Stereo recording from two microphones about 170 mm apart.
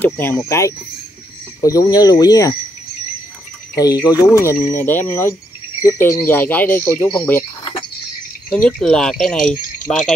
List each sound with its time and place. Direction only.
0.0 s speech: 10° left (ahead or behind)
3.7 s speech: 20° left (ahead or behind)
8.5 s speech: 5° left (ahead or behind)